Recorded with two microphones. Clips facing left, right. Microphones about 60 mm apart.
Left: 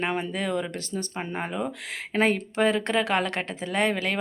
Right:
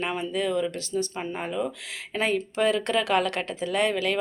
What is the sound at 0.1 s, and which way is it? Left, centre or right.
Speech, left.